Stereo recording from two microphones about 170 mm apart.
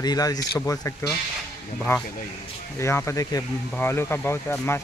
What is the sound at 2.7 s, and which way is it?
Speech, 15° left (ahead or behind).